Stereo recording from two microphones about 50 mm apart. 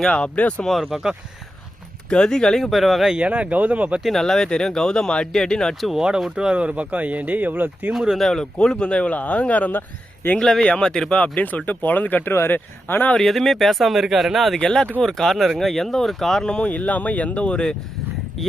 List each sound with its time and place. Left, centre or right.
0.0 s speech: centre
0.6 s speech: centre
2.0 s speech: centre
2.6 s speech: centre
3.2 s speech: right
4.2 s speech: centre
5.8 s speech: centre
6.3 s speech: centre; by 7.9 s right
8.2 s speech: centre; by 9.8 s left
10.6 s speech: centre
11.1 s speech: left
13.1 s speech: centre
14.6 s speech: centre
16.6 s speech: left